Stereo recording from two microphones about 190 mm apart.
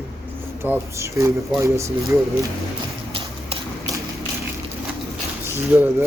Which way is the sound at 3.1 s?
30° right (ahead or behind).